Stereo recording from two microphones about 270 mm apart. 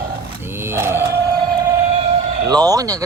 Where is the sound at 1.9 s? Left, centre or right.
Right.